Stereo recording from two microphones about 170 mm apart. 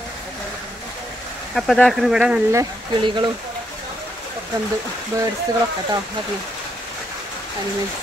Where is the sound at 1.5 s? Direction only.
Centre (ahead or behind).